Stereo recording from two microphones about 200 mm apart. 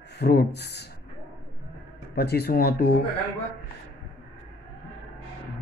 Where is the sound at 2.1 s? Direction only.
55° left (ahead or behind).